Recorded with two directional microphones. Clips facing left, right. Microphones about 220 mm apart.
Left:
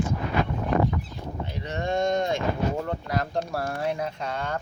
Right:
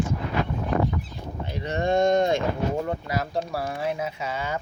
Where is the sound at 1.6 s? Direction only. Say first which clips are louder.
Right 4 dB; 50° right (ahead or behind).